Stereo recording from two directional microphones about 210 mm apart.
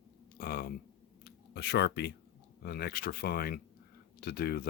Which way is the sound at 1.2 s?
55° left (ahead or behind).